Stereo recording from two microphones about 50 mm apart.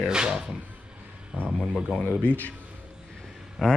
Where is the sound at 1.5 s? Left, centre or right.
Centre.